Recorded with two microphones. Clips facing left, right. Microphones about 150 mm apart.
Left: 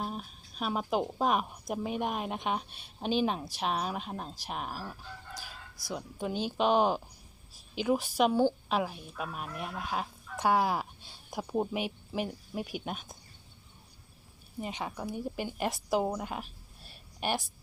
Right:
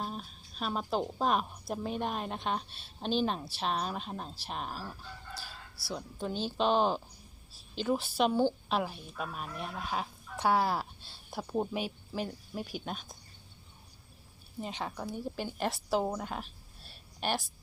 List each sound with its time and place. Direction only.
0.0 s a woman's voice: 5° left (ahead or behind)
14.6 s a woman's voice: 10° left (ahead or behind)